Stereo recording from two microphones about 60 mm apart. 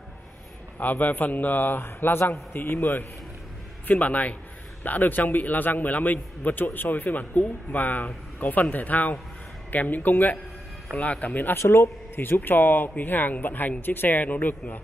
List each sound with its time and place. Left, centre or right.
0.7 s a man's voice: left
11.5 s a man's voice: left